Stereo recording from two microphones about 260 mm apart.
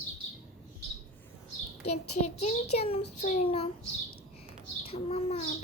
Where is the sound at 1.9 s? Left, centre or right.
Left.